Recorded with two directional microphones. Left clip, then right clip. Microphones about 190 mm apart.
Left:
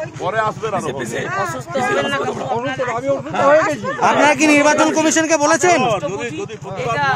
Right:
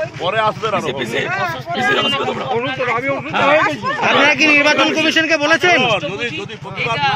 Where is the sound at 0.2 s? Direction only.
10° left (ahead or behind).